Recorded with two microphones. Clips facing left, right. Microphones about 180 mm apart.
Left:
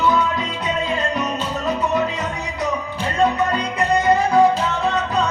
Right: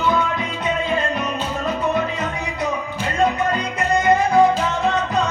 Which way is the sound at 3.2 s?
35° left (ahead or behind).